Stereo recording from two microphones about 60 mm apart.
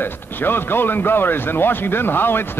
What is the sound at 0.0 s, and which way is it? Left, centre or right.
A man's voice, left.